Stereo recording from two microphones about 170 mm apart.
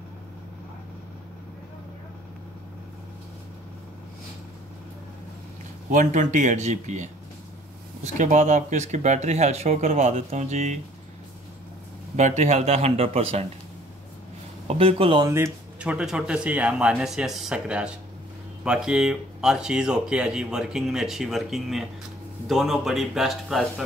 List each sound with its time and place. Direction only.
5.9 s speech: 50° right (ahead or behind)
12.2 s speech: 45° right (ahead or behind)
14.8 s speech: 35° right (ahead or behind)
15.2 s speech: 15° right (ahead or behind)